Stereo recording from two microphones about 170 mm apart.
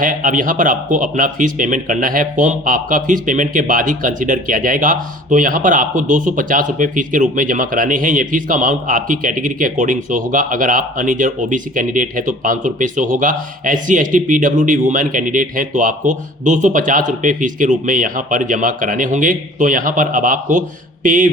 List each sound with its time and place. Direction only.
0.0 s speech: 50° right (ahead or behind)